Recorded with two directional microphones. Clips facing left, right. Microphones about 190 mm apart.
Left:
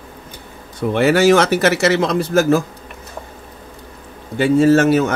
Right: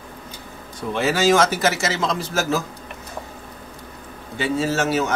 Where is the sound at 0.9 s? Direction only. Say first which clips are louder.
Left 5 dB; 65° left (ahead or behind).